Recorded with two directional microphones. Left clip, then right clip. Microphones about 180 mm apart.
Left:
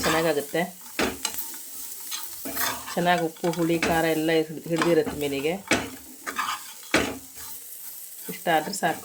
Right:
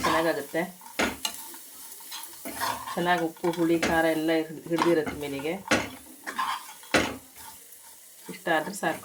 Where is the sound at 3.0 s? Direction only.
50° left (ahead or behind).